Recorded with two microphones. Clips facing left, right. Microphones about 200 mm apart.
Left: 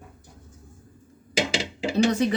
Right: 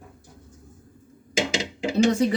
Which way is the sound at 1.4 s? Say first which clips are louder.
Even; 5° left (ahead or behind).